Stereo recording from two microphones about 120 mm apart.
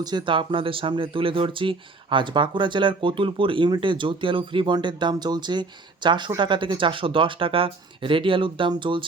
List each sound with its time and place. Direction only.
0.0 s speech: 35° right (ahead or behind)